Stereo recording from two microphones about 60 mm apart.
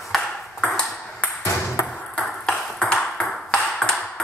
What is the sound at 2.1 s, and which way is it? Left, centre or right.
Ping, centre.